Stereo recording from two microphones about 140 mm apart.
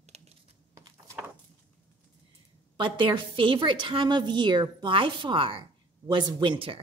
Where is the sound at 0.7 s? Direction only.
20° right (ahead or behind).